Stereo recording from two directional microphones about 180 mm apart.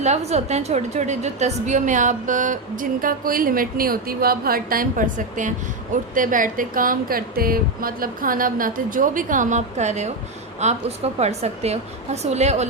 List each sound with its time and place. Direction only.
0.0 s a woman's voice: 40° right (ahead or behind)